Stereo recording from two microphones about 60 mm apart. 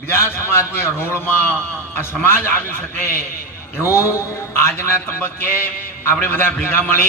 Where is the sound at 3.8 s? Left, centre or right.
Left.